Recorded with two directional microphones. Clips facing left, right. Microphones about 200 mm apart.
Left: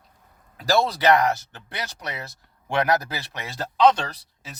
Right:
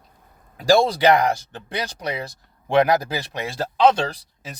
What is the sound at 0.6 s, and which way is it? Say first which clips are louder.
Speech: right 5 dB; 15° right (ahead or behind).